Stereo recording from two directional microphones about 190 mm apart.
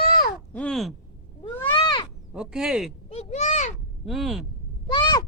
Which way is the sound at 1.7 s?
25° left (ahead or behind).